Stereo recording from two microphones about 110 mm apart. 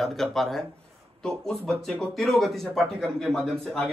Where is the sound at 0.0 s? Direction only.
Centre (ahead or behind).